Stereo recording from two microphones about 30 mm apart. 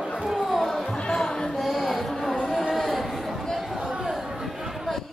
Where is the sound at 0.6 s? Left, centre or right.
Centre.